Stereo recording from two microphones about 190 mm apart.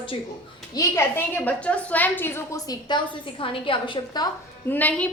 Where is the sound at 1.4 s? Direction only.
5° left (ahead or behind); by 4.2 s 25° left (ahead or behind).